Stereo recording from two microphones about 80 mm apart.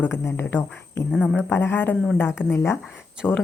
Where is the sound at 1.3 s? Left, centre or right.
Left.